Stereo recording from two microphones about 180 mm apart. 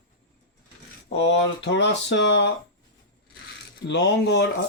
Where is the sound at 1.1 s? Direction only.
85° left.